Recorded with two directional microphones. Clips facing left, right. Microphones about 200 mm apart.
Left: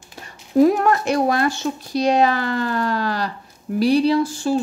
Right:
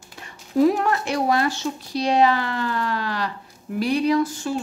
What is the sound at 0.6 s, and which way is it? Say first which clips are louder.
Speech: left 3 dB; 45° left (ahead or behind).